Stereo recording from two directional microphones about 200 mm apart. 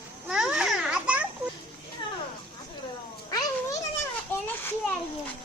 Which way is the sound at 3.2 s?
20° left (ahead or behind).